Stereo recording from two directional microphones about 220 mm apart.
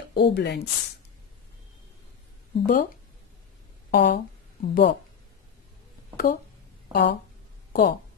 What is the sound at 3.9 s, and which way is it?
Speech, 50° left (ahead or behind).